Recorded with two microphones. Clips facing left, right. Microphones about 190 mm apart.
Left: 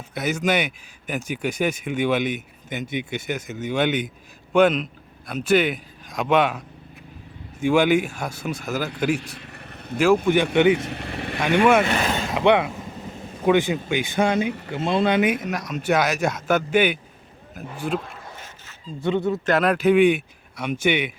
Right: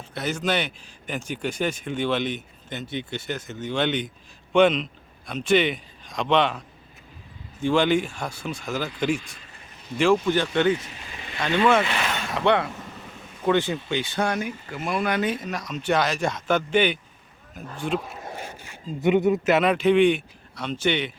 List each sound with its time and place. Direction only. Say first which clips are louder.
0.1 s a man's voice: left 3 dB; 10° left (ahead or behind)
7.6 s a man's voice: left 3 dB; 10° left (ahead or behind)
9.1 s vehicle: left 3 dB; 65° left (ahead or behind)
10.3 s speech: left 4 dB; 15° left (ahead or behind)
10.8 s speech: left 11 dB; 65° left (ahead or behind)
11.3 s speech: left 3 dB; 10° left (ahead or behind)
11.8 s speech: left 4 dB; 40° left (ahead or behind)
12.3 s speech: left 3 dB; 15° left (ahead or behind)
15.4 s a man's voice: left 2 dB; 10° left (ahead or behind)
18.4 s a sound: right 4 dB; 15° right (ahead or behind)
19.5 s speech: left 5 dB; centre (ahead or behind)